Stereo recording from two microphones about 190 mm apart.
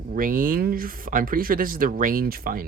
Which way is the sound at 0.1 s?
45° right (ahead or behind).